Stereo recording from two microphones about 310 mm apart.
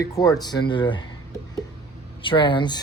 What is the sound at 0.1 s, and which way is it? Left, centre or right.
Speech, centre.